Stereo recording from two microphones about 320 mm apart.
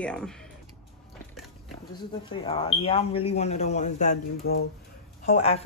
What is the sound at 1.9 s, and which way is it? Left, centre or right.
Speech, centre.